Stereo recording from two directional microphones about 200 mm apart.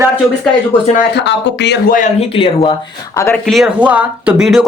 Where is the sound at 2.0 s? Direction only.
35° left (ahead or behind).